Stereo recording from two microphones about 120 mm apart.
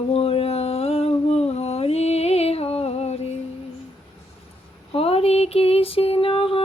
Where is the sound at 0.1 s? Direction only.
55° left (ahead or behind).